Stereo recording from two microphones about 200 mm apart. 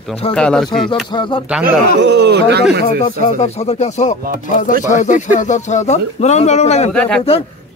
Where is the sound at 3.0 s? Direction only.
30° left (ahead or behind).